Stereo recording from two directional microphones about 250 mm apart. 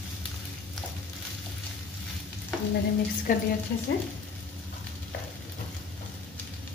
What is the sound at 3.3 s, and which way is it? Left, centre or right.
Speech, left.